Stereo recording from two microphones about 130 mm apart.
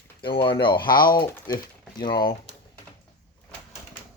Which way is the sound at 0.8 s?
90° left.